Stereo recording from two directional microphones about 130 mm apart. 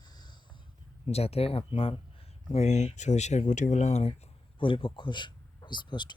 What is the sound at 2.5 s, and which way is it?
Speech, 60° left (ahead or behind).